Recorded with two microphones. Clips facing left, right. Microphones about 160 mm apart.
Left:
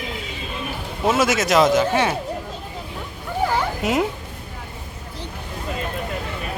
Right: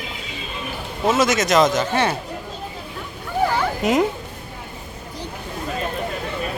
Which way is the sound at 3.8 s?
5° left (ahead or behind).